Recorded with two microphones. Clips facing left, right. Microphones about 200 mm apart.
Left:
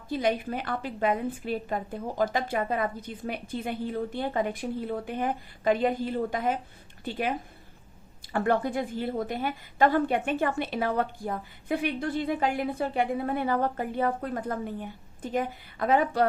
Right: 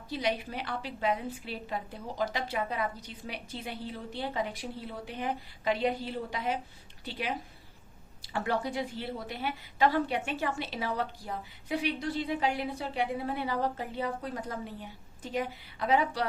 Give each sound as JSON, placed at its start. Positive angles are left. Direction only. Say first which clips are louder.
{"t": 0.1, "sound": "a woman's voice", "louder": "left 5 dB", "side_deg": 50}